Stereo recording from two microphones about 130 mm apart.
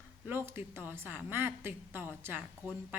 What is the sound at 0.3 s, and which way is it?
A woman's voice, 15° right (ahead or behind).